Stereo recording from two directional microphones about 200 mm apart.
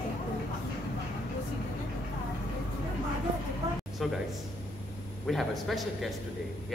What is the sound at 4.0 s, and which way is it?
Speech, centre (ahead or behind).